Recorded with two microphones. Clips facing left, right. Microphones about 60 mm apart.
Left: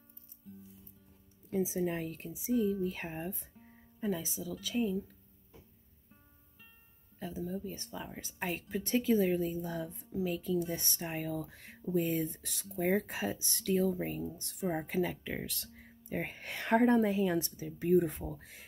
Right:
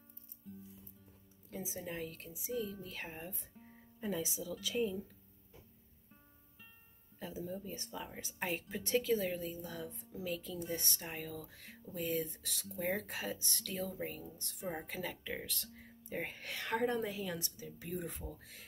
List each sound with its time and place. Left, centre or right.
0.5 s music: centre
1.5 s a woman's voice: centre
2.5 s speech: centre
2.8 s speech: centre
3.3 s speech: centre
7.4 s speech: centre
9.0 s speech: centre
11.0 s speech: centre
11.8 s speech: left
12.1 s speech: centre